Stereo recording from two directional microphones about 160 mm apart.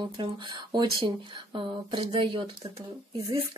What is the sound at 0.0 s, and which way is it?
Speech, 30° right (ahead or behind).